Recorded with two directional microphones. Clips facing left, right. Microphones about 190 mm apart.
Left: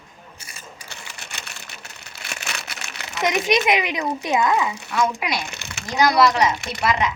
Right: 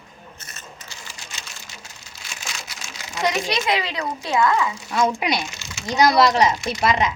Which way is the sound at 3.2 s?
20° left (ahead or behind).